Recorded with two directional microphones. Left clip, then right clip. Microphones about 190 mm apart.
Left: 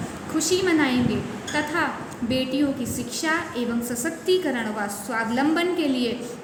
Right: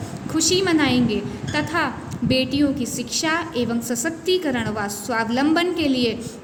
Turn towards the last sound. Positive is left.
turn(degrees=-50)  # may be behind; listen again after turning